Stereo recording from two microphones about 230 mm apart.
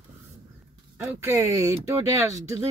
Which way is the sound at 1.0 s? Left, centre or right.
Centre.